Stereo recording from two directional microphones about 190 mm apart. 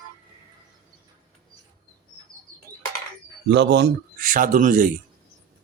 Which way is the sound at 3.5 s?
65° right (ahead or behind).